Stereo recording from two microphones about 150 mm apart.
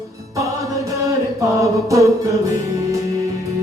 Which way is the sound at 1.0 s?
20° right (ahead or behind).